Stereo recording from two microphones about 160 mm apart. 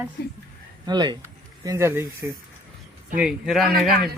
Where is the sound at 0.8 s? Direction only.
25° right (ahead or behind).